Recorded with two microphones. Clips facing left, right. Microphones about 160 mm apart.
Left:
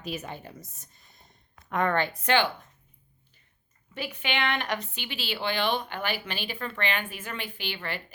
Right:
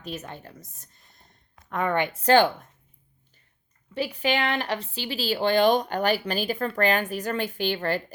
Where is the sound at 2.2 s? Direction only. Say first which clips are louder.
Right 7 dB; 40° right (ahead or behind).